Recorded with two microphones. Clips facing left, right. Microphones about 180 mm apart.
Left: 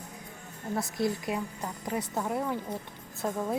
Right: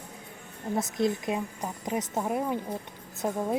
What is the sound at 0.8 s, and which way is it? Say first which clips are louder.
A woman's voice: right 3 dB; 20° right (ahead or behind).